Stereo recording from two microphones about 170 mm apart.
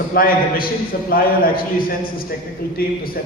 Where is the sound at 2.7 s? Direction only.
60° left (ahead or behind).